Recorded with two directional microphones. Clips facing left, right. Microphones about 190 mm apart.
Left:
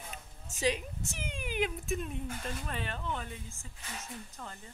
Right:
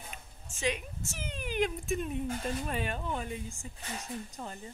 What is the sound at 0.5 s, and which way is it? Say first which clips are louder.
Speech: left 2 dB; 35° left (ahead or behind).